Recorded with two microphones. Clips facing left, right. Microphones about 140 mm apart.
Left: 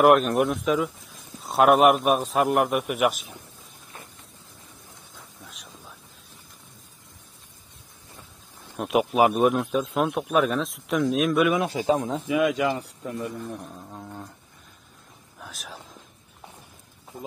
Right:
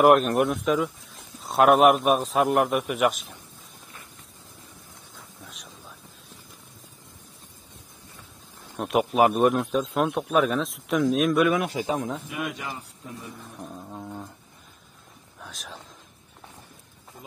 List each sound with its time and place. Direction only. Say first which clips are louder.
0.0 s a man's voice: even; centre (ahead or behind)
5.1 s a sound: right 1 dB; centre (ahead or behind)
8.7 s a man's voice: even; centre (ahead or behind)
11.5 s a man's voice: left 3 dB; 30° left (ahead or behind)
12.4 s a man's voice: left 10 dB; 90° left; by 13.3 s 75° left (ahead or behind)
13.7 s a man's voice: right 2 dB; 5° right (ahead or behind)
15.3 s speech: left 1 dB; centre (ahead or behind)